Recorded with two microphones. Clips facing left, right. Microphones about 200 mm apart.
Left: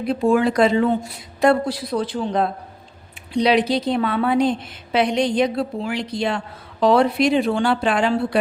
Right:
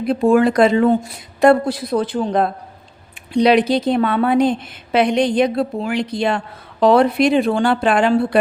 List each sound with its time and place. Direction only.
0.1 s a woman's voice: 50° right (ahead or behind)